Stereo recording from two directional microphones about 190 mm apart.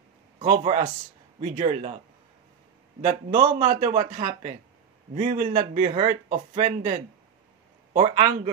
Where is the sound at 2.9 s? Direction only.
40° right (ahead or behind).